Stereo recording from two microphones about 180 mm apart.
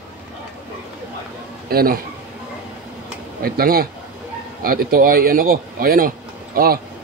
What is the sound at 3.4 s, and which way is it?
Speech, 55° right (ahead or behind).